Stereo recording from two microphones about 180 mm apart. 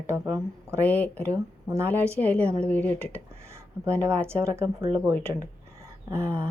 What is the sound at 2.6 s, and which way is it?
Speech, 10° left (ahead or behind).